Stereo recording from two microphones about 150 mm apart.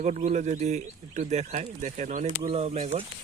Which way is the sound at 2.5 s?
45° right (ahead or behind).